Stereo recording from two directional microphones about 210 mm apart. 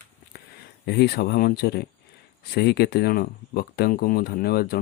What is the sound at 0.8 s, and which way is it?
Speech, 50° left (ahead or behind).